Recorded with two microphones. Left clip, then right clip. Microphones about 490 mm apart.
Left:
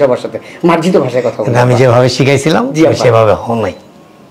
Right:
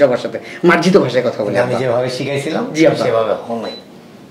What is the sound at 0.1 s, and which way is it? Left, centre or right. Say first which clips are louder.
Speech: left 4 dB; left.